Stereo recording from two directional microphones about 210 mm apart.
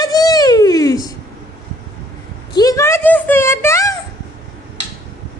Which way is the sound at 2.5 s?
15° left (ahead or behind).